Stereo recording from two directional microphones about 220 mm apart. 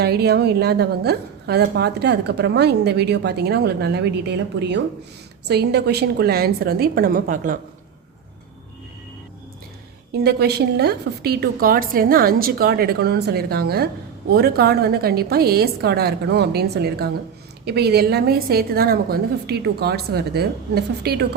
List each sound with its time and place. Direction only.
0.0 s a woman's voice: 45° right (ahead or behind)
10.1 s a woman's voice: 45° right (ahead or behind)